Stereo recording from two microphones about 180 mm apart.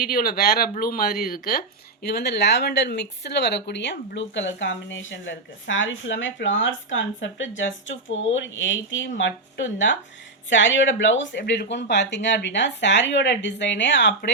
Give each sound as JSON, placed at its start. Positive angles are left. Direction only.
{"t": 0.0, "sound": "speech", "side_deg": 55}